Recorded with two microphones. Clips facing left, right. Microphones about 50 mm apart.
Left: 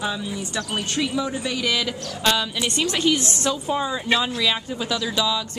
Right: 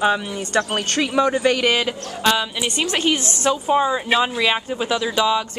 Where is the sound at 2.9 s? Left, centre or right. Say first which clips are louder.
Even; right.